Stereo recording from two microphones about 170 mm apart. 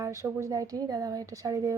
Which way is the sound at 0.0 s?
15° right (ahead or behind).